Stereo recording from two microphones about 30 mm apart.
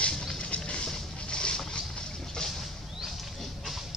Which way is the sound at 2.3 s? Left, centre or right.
Centre.